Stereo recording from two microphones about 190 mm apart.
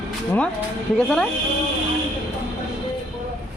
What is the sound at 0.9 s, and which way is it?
Speech, 5° left (ahead or behind).